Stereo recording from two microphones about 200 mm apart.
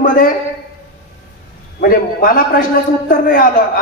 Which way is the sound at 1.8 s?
45° left (ahead or behind).